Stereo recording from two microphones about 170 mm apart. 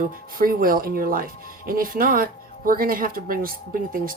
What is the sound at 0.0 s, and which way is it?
Speech, 60° right (ahead or behind).